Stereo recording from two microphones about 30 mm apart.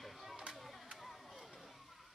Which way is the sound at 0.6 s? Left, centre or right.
Centre.